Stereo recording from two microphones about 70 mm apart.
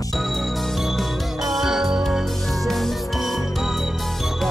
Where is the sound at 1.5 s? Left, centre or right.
Centre.